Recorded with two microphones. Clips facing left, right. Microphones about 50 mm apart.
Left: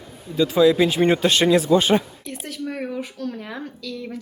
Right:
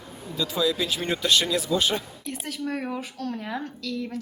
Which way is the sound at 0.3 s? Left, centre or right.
Left.